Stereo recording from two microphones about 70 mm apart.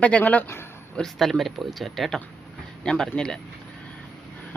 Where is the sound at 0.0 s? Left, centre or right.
Left.